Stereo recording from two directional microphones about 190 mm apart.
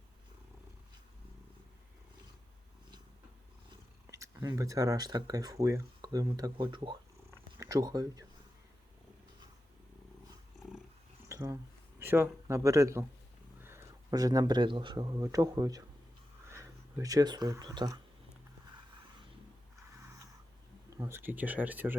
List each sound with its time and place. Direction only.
4.1 s speech: 15° right (ahead or behind)
11.3 s speech: 20° right (ahead or behind)
20.9 s speech: 15° right (ahead or behind)